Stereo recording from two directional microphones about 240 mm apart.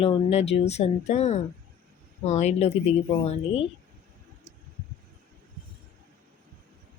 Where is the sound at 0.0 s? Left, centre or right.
Left.